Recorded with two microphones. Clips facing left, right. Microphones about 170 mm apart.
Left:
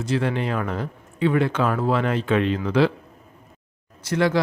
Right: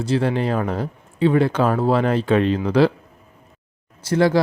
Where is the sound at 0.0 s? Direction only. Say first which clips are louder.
Right 3 dB; 35° right (ahead or behind).